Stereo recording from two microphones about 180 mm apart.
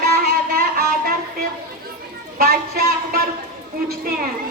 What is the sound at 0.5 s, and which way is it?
Music, 55° right (ahead or behind).